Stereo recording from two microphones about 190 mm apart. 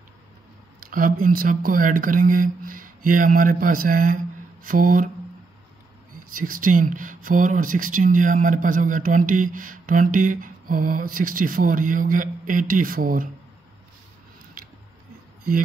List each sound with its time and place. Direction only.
0.7 s speech: 50° right (ahead or behind)
6.3 s speech: 50° right (ahead or behind)